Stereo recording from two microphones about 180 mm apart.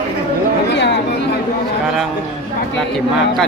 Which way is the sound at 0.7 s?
75° left (ahead or behind).